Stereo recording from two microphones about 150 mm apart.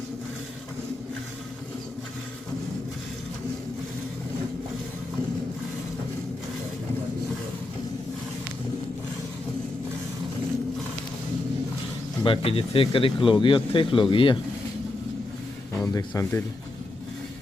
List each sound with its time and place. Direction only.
12.2 s speech: 35° left (ahead or behind)
15.9 s speech: 20° left (ahead or behind)